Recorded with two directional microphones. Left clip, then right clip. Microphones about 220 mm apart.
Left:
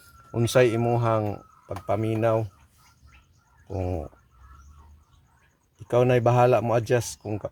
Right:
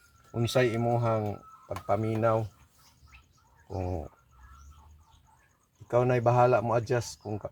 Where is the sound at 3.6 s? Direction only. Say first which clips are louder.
Left 4 dB; 45° left (ahead or behind).